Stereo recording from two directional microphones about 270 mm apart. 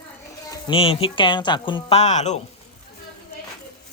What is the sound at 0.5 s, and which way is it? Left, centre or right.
Speech, centre.